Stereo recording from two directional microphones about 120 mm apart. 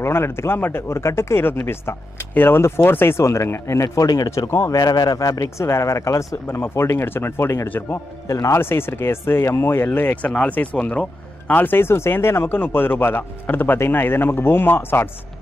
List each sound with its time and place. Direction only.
0.0 s speech: 20° left (ahead or behind)
4.7 s speech: 35° left (ahead or behind); by 15.0 s 20° left (ahead or behind)